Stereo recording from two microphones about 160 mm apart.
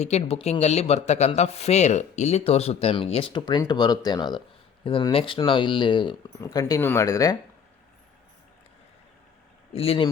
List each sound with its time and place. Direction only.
0.0 s speech: 40° left (ahead or behind); by 7.3 s 20° left (ahead or behind)
9.7 s speech: 35° left (ahead or behind)